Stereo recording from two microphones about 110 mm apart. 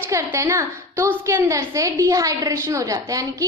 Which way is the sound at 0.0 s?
25° right (ahead or behind).